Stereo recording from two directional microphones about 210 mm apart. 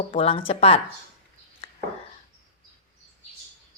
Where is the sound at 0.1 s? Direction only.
30° left (ahead or behind).